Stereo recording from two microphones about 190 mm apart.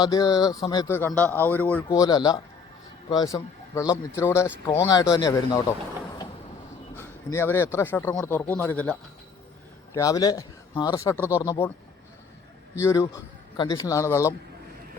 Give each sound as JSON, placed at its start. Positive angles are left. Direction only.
{"t": 0.0, "sound": "speech", "side_deg": 20}
{"t": 1.9, "sound": "speech", "side_deg": 20}
{"t": 6.9, "sound": "speech", "side_deg": 15}
{"t": 9.9, "sound": "speech", "side_deg": 15}
{"t": 12.8, "sound": "speech", "side_deg": 15}